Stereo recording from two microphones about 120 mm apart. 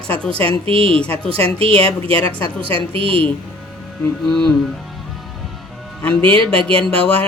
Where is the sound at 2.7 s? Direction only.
50° right (ahead or behind).